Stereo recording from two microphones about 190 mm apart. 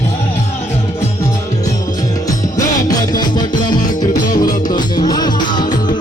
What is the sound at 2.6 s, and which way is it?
Music, 20° left (ahead or behind).